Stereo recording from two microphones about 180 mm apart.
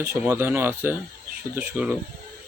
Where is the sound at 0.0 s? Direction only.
10° right (ahead or behind).